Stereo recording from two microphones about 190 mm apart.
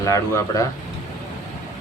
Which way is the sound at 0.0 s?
15° left (ahead or behind).